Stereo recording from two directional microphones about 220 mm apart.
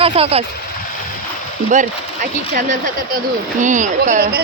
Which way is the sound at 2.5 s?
35° right (ahead or behind).